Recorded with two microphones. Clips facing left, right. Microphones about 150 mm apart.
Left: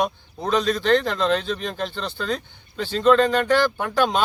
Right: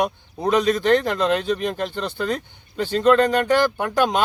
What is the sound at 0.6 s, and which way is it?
Speech, 55° right (ahead or behind).